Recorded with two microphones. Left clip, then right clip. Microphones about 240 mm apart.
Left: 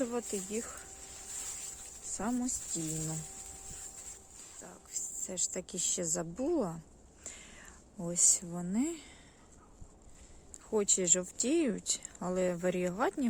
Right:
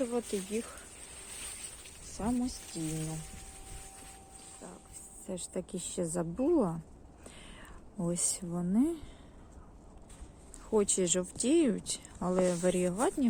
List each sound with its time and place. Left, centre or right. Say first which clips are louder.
0.1 s speech: right 2 dB; centre
2.1 s speech: right 1 dB; centre
5.2 s speech: right 1 dB; centre
7.3 s whispering: left 1 dB; centre
10.7 s speech: right 1 dB; centre